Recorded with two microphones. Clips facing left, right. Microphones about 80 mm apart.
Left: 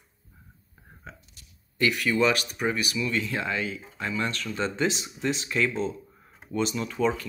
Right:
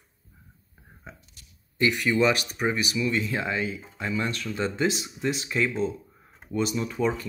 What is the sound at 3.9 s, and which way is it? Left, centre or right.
Speech, centre.